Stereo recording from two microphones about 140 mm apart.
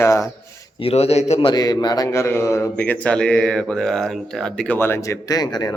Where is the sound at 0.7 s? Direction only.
45° left (ahead or behind).